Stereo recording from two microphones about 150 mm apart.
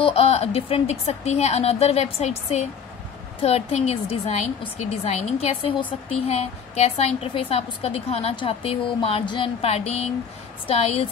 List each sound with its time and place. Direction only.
0.0 s a woman's voice: 40° left (ahead or behind)